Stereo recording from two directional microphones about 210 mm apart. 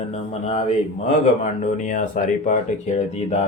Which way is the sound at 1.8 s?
35° left (ahead or behind).